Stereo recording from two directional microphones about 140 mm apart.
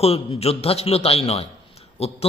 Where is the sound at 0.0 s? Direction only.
45° left (ahead or behind).